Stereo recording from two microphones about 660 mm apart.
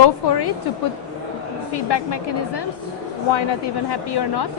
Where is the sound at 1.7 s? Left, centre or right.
Left.